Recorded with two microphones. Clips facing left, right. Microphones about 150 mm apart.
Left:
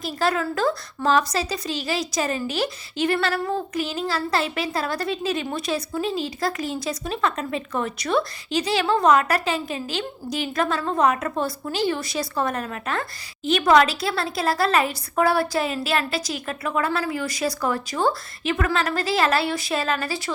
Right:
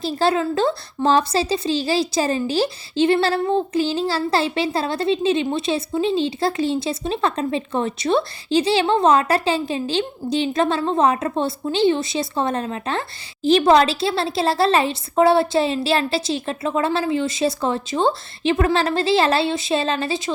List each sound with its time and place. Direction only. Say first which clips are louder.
0.0 s a woman's voice: right 4 dB; 30° right (ahead or behind)